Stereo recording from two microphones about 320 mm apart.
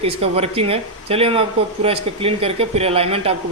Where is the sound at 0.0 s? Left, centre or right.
Centre.